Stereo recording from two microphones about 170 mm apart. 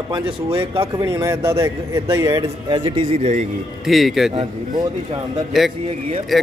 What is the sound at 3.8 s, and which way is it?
Speech, centre (ahead or behind).